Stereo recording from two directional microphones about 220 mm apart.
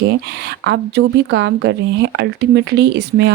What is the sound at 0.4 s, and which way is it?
Speech, 50° right (ahead or behind).